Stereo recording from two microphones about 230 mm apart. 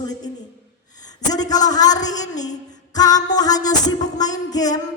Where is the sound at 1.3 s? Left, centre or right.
Centre.